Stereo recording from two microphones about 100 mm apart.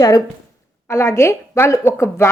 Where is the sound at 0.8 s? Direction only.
25° left (ahead or behind).